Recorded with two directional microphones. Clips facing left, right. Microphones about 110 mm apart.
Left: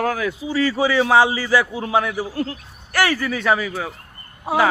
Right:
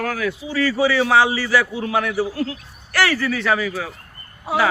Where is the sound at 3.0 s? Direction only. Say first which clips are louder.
Even; 15° left (ahead or behind).